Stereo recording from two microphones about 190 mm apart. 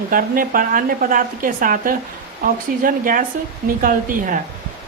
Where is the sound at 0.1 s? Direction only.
50° right (ahead or behind).